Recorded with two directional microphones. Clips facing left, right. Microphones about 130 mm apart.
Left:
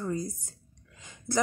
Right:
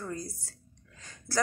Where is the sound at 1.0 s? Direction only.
15° left (ahead or behind).